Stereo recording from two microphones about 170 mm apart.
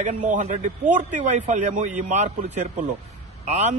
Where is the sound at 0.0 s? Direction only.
45° right (ahead or behind).